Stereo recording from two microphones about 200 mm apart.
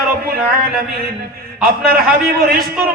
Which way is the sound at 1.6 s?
50° right (ahead or behind).